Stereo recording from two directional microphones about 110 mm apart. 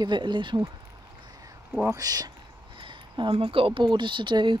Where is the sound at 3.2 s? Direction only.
55° right (ahead or behind).